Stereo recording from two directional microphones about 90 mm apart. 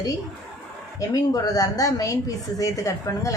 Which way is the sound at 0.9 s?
45° left (ahead or behind).